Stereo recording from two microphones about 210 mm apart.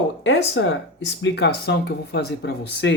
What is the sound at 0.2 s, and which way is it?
Speech, 60° left (ahead or behind).